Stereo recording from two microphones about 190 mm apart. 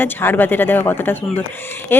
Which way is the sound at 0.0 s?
10° left (ahead or behind).